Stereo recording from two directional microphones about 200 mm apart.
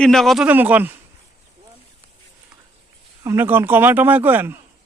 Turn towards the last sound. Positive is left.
turn(degrees=-10)  # may be behind; listen again after turning